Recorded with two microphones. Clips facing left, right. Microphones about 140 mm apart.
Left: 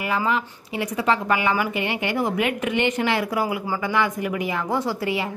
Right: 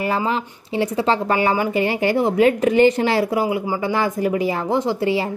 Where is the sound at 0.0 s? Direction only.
35° right (ahead or behind).